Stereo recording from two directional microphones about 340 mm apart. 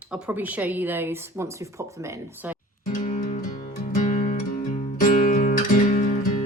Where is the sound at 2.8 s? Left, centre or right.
Left.